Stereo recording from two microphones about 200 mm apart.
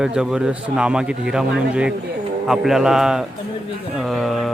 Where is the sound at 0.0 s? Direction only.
5° right (ahead or behind).